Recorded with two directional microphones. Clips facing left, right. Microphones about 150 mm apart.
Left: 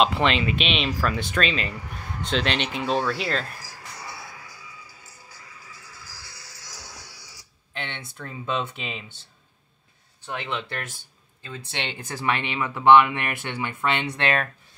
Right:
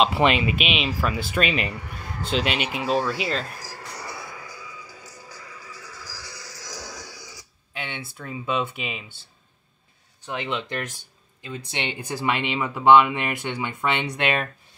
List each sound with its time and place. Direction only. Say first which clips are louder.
0.0 s speech: right 1 dB; 10° right (ahead or behind)
3.9 s music: right 2 dB; 70° right (ahead or behind)
5.0 s music: right 6 dB; 90° right
7.7 s speech: right 1 dB; 10° right (ahead or behind)
10.2 s speech: right 2 dB; 15° right (ahead or behind)